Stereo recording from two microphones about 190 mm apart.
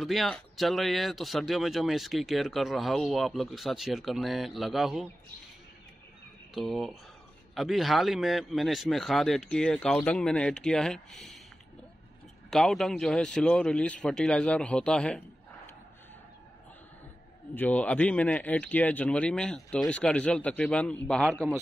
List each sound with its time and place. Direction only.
0.0 s speech: centre (ahead or behind)
6.5 s speech: centre (ahead or behind)
12.4 s speech: centre (ahead or behind)
17.6 s speech: 5° left (ahead or behind)